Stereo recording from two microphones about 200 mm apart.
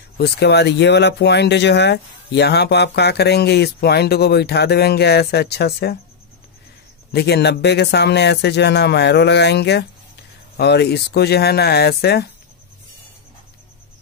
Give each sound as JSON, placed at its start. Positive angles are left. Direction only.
{"t": 0.2, "sound": "speech", "side_deg": 55}
{"t": 7.1, "sound": "speech", "side_deg": 55}